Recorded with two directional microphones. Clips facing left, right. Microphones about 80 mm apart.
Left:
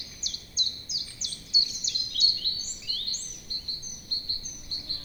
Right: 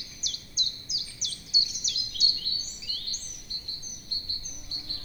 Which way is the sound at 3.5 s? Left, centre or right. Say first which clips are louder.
Left 2 dB; left.